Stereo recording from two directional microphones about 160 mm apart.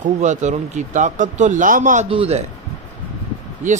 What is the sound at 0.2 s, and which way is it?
Speech, 50° right (ahead or behind).